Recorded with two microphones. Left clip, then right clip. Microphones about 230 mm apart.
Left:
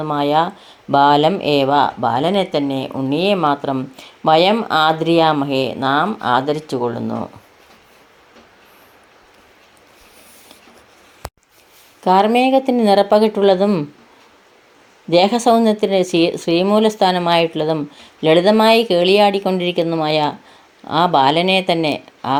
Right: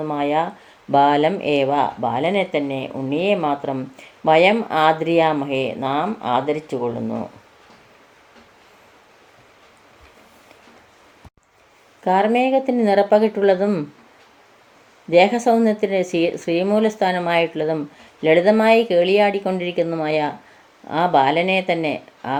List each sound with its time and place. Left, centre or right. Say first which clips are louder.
0.0 s speech: left 4 dB; left
12.0 s speech: left 4 dB; left
15.1 s speech: left 2 dB; left